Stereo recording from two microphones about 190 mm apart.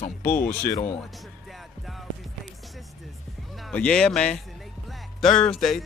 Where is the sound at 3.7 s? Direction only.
5° left (ahead or behind).